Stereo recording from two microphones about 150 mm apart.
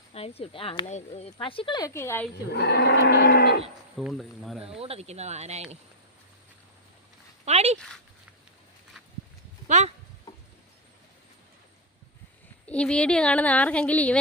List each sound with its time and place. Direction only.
0.1 s speech: 40° left (ahead or behind)
1.9 s a woman's voice: 15° left (ahead or behind)
2.5 s livestock: 90° left
3.9 s speech: centre (ahead or behind)
4.6 s speech: 40° right (ahead or behind)
7.4 s speech: 45° right (ahead or behind)
9.6 s a sound: 50° right (ahead or behind)
12.6 s a woman's voice: 5° left (ahead or behind)